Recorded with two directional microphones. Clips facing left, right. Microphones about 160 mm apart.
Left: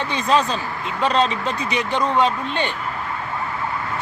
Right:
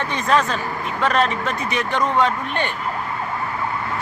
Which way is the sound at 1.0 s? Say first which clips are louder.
Even; 20° left (ahead or behind).